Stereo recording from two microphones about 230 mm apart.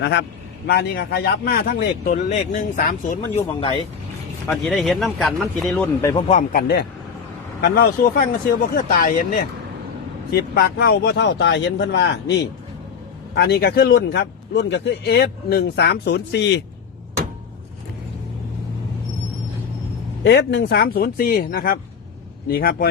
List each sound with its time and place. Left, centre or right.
0.0 s speech: left
4.4 s speech: centre
6.0 s speech: centre
6.2 s speech: left
6.6 s speech: left
13.3 s speech: left
20.2 s speech: left